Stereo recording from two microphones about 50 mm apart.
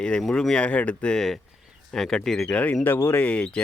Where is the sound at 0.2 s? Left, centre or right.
Centre.